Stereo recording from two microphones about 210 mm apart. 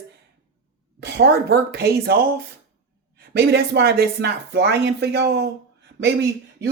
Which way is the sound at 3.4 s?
55° right (ahead or behind).